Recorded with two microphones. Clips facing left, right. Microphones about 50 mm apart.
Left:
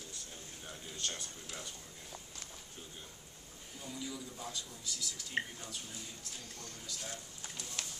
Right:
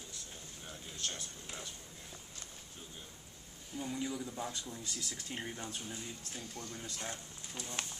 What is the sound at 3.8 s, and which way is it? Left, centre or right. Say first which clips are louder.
Speech: right 5 dB; right.